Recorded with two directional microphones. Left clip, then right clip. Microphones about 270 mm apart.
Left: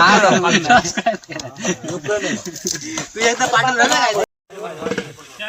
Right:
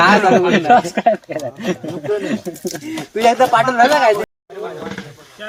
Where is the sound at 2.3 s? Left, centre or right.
Centre.